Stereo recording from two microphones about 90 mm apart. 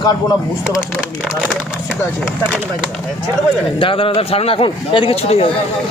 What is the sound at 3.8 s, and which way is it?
A man's voice, 85° left.